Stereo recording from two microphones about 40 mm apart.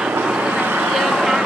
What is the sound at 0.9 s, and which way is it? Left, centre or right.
Vehicle, centre.